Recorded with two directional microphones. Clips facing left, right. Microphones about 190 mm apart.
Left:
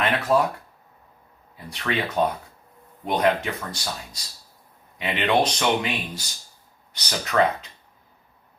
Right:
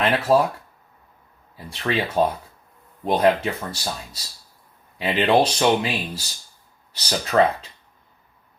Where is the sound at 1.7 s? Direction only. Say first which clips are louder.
Right 3 dB; 30° right (ahead or behind).